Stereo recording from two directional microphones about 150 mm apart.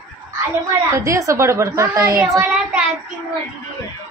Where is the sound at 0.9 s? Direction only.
20° right (ahead or behind).